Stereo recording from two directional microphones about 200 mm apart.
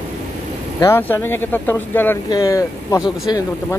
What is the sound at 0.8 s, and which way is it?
Speech, 10° left (ahead or behind).